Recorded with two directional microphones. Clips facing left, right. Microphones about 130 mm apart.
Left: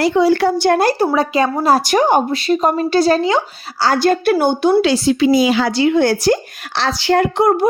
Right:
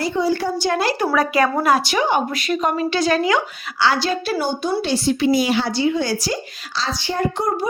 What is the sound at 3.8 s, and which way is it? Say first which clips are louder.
A woman's voice: left 6 dB; 50° left (ahead or behind).